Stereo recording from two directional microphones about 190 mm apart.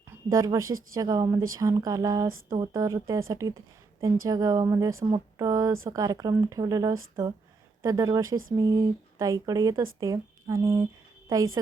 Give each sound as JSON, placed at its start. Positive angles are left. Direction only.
{"t": 0.3, "sound": "speech", "side_deg": -15}